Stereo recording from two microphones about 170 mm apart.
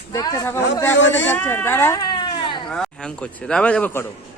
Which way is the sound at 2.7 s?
5° left (ahead or behind).